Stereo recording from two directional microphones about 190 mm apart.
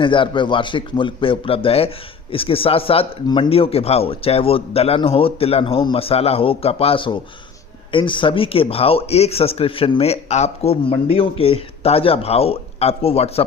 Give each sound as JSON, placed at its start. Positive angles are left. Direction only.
{"t": 0.0, "sound": "a man's voice", "side_deg": 25}